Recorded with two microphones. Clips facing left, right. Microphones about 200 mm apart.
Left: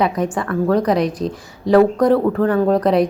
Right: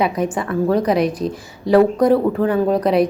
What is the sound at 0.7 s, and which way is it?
Speech, 5° right (ahead or behind).